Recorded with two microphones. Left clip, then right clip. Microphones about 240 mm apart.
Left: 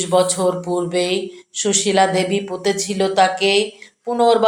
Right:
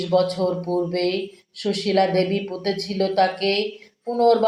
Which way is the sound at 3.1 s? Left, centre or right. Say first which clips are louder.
Left 6 dB; left.